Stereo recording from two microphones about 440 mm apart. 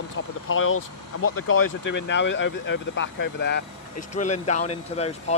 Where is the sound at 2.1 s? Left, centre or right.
Left.